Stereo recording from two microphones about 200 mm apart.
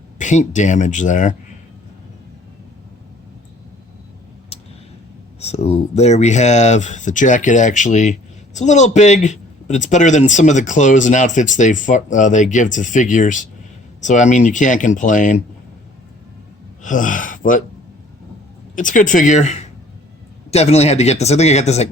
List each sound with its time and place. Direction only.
0.2 s a man's voice: 40° left (ahead or behind)
5.4 s a man's voice: 30° left (ahead or behind)
16.8 s speech: 40° left (ahead or behind)
18.8 s a man's voice: 40° left (ahead or behind)